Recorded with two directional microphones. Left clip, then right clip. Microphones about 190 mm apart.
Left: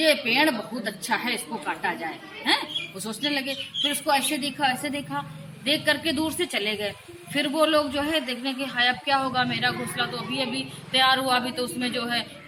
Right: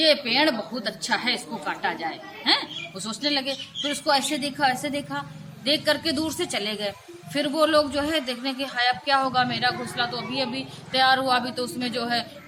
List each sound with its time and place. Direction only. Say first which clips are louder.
0.0 s a man's voice: right 1 dB; 10° right (ahead or behind)
3.8 s a man's voice: right 1 dB; 10° right (ahead or behind)